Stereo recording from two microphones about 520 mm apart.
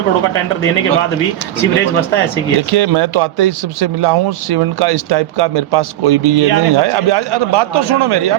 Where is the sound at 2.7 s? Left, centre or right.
Right.